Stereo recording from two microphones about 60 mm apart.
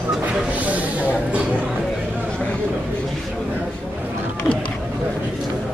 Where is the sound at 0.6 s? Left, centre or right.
Right.